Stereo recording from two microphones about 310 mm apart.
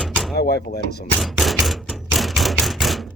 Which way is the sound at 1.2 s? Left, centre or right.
Centre.